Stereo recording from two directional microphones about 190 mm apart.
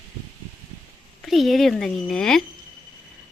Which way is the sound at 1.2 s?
Centre (ahead or behind).